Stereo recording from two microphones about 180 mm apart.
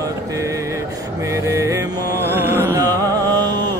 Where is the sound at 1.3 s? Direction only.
15° right (ahead or behind).